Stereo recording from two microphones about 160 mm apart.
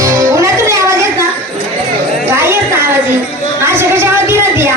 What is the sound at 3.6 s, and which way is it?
Music, 15° right (ahead or behind).